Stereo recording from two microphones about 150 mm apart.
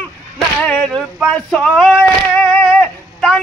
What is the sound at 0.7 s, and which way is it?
Male singing, 5° left (ahead or behind).